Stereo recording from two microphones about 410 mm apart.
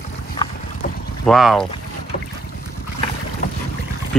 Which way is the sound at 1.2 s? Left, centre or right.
Centre.